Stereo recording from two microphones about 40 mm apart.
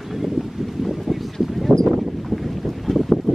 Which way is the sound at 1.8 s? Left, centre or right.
Centre.